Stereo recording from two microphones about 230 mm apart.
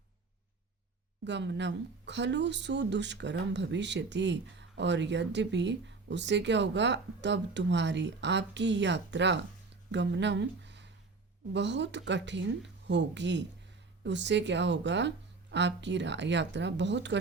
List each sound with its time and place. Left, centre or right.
1.2 s speech: right